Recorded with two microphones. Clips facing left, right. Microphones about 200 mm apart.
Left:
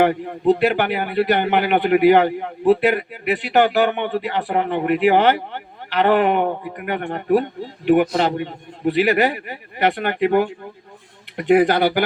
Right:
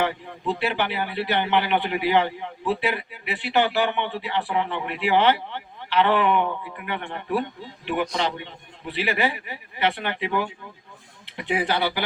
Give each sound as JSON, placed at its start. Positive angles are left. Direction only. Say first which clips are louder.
{"t": 0.0, "sound": "a man's voice", "louder": "left 9 dB", "side_deg": 50}